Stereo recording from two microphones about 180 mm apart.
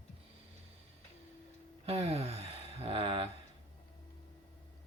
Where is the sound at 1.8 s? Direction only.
35° right (ahead or behind).